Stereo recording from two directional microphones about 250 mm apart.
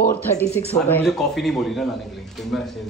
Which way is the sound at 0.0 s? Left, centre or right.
Left.